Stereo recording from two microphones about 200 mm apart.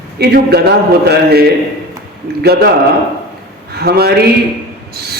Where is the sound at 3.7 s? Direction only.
50° right (ahead or behind).